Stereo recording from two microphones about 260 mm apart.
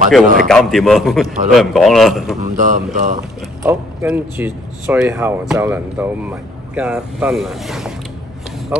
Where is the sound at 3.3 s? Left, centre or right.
Centre.